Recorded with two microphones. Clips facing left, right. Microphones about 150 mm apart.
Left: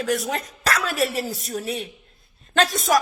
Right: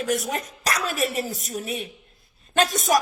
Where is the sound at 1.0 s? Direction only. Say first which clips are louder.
Left 2 dB; 20° right (ahead or behind).